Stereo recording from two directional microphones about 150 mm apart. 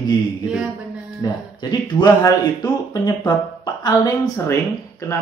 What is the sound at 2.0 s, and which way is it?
Speech, 25° left (ahead or behind).